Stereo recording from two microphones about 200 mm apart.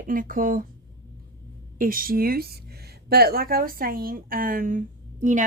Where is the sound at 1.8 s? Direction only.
45° right (ahead or behind).